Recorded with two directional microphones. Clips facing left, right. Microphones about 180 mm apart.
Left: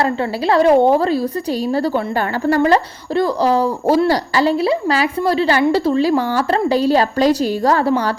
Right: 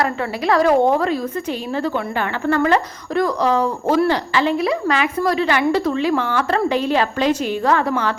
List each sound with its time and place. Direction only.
0.0 s speech: 30° left (ahead or behind)
2.5 s speech: 35° left (ahead or behind)